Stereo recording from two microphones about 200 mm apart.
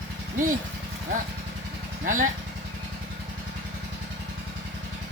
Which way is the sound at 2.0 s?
40° right (ahead or behind).